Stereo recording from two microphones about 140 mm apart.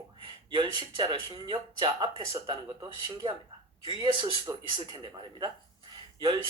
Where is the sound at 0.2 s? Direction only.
35° right (ahead or behind).